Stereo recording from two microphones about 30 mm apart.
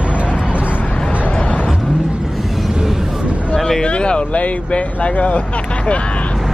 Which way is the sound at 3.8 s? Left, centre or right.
Left.